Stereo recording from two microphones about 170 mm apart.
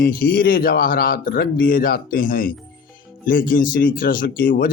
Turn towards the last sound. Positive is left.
turn(degrees=55)  # may be behind; listen again after turning